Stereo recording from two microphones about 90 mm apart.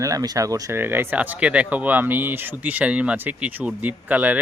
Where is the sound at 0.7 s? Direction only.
25° right (ahead or behind).